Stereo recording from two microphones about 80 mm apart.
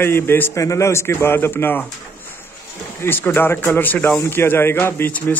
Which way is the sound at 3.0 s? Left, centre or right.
Left.